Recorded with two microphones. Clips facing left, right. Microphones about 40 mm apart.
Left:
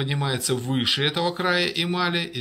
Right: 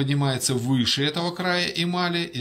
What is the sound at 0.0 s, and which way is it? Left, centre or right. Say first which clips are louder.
Speech: right 2 dB; centre.